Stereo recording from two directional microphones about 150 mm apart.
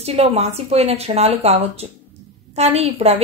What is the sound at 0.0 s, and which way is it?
A woman's voice, 45° right (ahead or behind).